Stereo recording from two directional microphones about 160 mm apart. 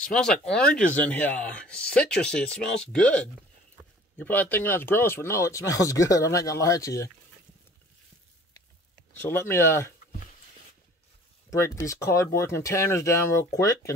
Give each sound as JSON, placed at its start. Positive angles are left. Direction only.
{"t": 0.0, "sound": "speech", "side_deg": 5}
{"t": 9.1, "sound": "speech", "side_deg": 15}
{"t": 11.5, "sound": "speech", "side_deg": 20}